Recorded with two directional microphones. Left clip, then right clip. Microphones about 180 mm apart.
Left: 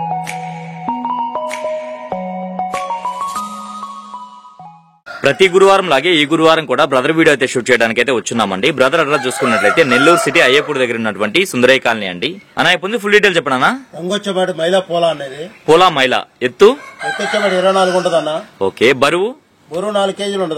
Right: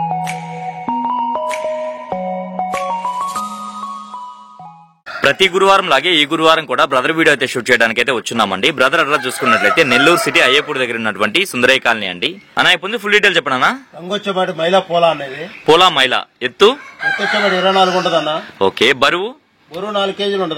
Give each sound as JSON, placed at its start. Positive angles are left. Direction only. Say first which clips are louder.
{"t": 0.8, "sound": "music", "louder": "right 1 dB", "side_deg": 0}
{"t": 5.2, "sound": "a man's voice", "louder": "left 2 dB", "side_deg": 0}
{"t": 14.1, "sound": "a man's voice", "louder": "even", "side_deg": 30}
{"t": 15.6, "sound": "a man's voice", "louder": "even", "side_deg": 0}
{"t": 17.3, "sound": "a man's voice", "louder": "left 2 dB", "side_deg": 35}
{"t": 18.2, "sound": "a man's voice", "louder": "right 2 dB", "side_deg": 0}
{"t": 19.9, "sound": "a man's voice", "louder": "even", "side_deg": 35}